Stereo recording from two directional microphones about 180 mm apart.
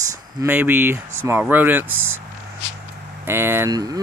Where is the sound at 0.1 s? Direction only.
15° right (ahead or behind).